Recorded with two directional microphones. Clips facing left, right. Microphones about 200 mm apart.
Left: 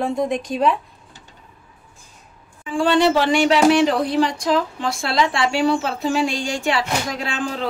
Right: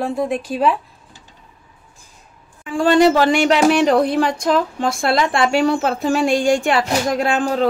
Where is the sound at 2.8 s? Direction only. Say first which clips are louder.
Right 4 dB; 45° right (ahead or behind).